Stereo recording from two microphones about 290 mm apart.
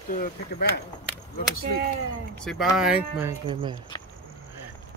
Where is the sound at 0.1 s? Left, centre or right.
Left.